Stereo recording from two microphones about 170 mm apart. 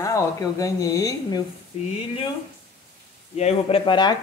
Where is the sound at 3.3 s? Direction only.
35° left (ahead or behind).